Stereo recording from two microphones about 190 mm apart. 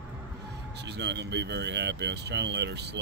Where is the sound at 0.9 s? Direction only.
65° right (ahead or behind).